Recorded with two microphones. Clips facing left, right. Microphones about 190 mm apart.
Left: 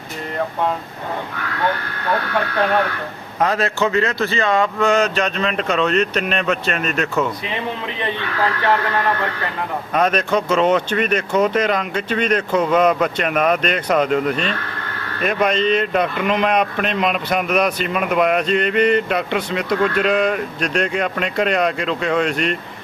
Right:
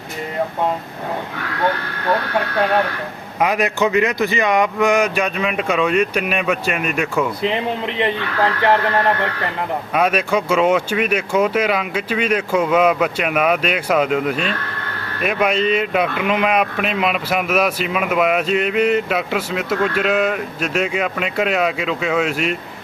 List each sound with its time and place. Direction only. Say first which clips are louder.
3.4 s speech: right 1 dB; 15° right (ahead or behind)
9.9 s speech: even; 10° right (ahead or behind)